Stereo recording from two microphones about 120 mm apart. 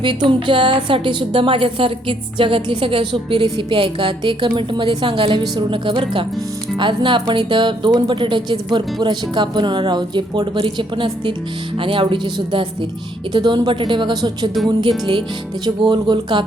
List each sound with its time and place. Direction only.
0.0 s a woman's voice: 40° right (ahead or behind)